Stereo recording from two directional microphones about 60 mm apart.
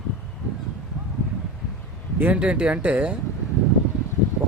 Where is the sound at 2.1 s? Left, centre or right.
Right.